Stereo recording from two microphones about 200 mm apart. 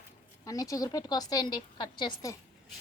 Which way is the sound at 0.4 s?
15° left (ahead or behind).